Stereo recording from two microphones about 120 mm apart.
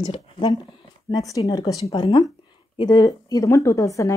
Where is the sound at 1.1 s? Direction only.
30° left (ahead or behind).